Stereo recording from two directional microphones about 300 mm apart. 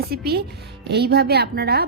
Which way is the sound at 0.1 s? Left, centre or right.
Right.